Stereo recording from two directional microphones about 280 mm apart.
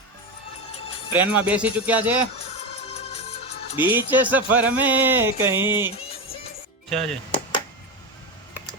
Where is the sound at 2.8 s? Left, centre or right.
Left.